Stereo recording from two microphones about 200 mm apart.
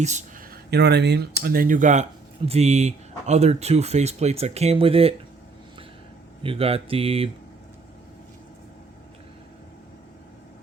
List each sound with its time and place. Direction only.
0.0 s speech: 35° right (ahead or behind)
6.4 s speech: 30° right (ahead or behind)